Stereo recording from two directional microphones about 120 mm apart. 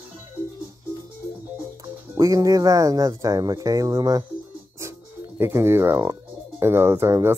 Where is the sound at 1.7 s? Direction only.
25° right (ahead or behind).